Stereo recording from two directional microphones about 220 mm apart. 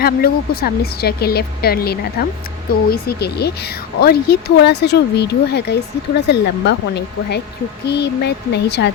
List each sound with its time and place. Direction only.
0.0 s speech: 45° left (ahead or behind)